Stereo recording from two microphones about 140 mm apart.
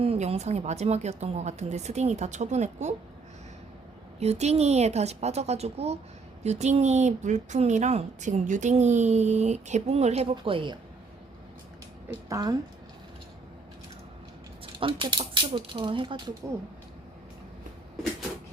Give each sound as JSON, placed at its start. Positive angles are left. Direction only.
{"t": 0.0, "sound": "speech", "side_deg": -45}
{"t": 4.2, "sound": "speech", "side_deg": -50}
{"t": 12.3, "sound": "speech", "side_deg": -25}
{"t": 14.8, "sound": "speech", "side_deg": -35}